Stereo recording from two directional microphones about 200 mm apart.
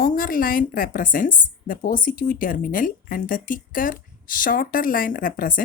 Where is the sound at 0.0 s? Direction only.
45° left (ahead or behind).